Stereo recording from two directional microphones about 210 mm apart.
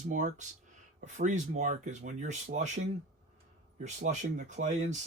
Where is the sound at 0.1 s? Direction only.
35° right (ahead or behind).